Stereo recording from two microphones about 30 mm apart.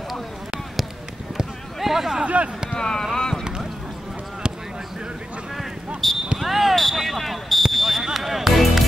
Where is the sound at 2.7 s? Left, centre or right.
Left.